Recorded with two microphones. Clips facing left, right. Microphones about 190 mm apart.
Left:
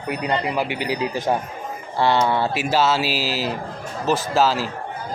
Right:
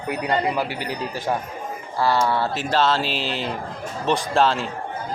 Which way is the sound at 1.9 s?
25° left (ahead or behind).